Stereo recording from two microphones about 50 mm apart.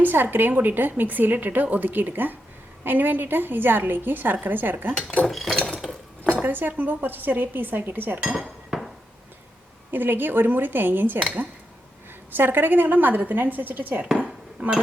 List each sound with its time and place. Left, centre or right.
0.0 s a woman's voice: right
5.3 s dishes: centre
6.3 s a woman's voice: right
8.4 s dishes: centre
9.9 s a woman's voice: right
12.3 s a woman's voice: right